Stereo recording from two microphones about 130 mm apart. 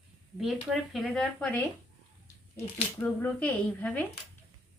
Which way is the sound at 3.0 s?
10° left (ahead or behind).